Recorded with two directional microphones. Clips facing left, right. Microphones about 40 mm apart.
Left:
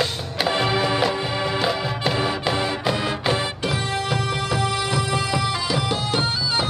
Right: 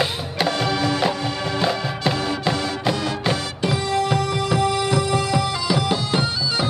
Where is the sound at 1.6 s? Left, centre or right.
Centre.